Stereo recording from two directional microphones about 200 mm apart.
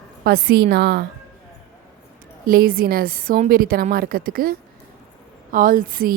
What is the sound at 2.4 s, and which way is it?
A woman's voice, 45° right (ahead or behind).